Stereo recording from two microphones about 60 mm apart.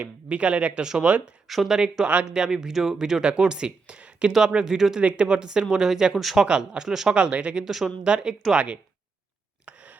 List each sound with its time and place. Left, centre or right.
0.0 s speech: right
1.5 s speech: centre
7.6 s speech: centre
8.0 s speech: centre
9.6 s a sound: right